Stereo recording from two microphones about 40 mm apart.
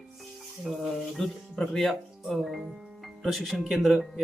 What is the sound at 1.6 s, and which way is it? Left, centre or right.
Speech, centre.